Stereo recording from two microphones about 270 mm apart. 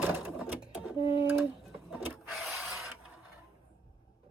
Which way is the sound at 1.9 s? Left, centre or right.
Centre.